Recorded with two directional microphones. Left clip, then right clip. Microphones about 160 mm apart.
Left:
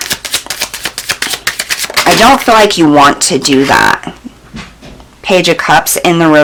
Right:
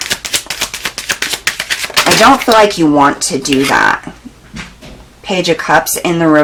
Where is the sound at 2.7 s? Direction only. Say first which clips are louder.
Left 4 dB; 25° left (ahead or behind).